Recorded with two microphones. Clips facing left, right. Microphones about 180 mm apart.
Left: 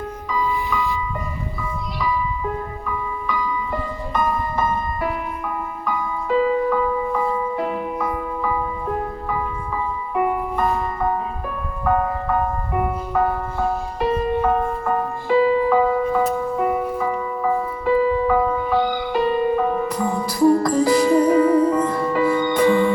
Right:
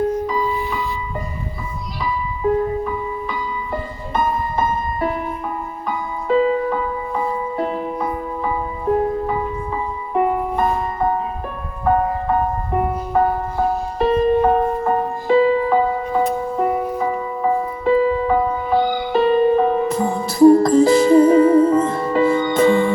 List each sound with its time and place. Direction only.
0.3 s music: 35° right (ahead or behind)
2.8 s music: 30° right (ahead or behind)
10.2 s music: 30° right (ahead or behind)